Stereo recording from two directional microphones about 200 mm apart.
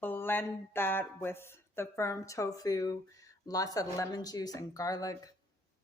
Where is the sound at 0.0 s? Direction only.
10° left (ahead or behind).